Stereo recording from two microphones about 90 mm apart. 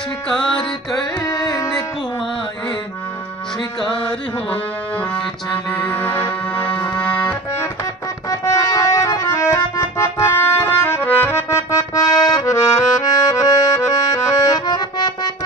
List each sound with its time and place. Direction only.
1.2 s carnatic music: 45° left (ahead or behind)
5.7 s accordion: 20° left (ahead or behind)
8.3 s music: 40° left (ahead or behind)
9.3 s accordion: 35° left (ahead or behind); by 15.3 s 55° left (ahead or behind)